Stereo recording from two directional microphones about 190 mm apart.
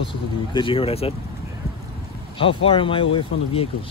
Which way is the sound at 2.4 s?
30° left (ahead or behind).